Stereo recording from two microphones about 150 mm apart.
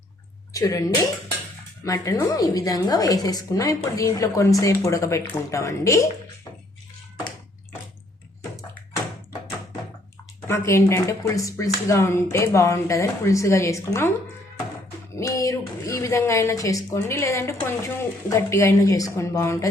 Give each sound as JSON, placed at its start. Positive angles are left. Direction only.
{"t": 0.5, "sound": "a woman's voice", "side_deg": 20}
{"t": 10.4, "sound": "a woman's voice", "side_deg": 20}
{"t": 15.1, "sound": "a woman's voice", "side_deg": 20}